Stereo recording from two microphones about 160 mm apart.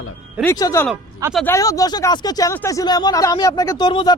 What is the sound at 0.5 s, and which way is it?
Speech, 20° left (ahead or behind).